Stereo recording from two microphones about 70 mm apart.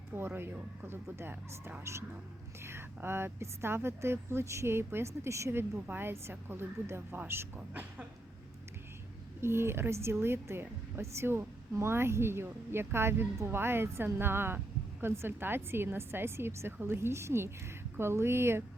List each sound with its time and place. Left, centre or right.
0.2 s speech: right
9.4 s speech: right